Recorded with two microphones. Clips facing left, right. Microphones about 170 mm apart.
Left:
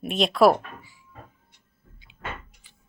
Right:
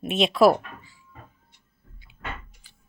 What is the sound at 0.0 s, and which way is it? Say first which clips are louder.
Speech: even; 5° right (ahead or behind).